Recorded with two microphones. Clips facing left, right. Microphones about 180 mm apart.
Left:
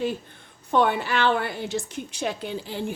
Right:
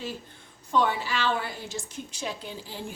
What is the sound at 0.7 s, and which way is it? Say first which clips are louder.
A woman's voice: left 4 dB; 60° left (ahead or behind).